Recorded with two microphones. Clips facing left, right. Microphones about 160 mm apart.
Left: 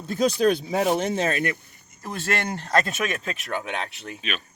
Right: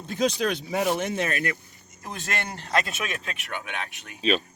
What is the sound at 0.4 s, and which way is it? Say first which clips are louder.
Speech: left 4 dB; 35° left (ahead or behind).